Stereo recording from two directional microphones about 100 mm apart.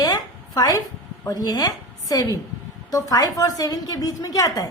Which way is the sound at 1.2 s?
35° left (ahead or behind).